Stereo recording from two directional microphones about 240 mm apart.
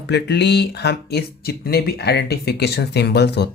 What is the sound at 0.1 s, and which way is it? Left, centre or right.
Speech, left.